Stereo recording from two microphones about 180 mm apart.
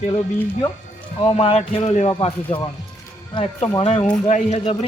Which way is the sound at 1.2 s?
30° left (ahead or behind).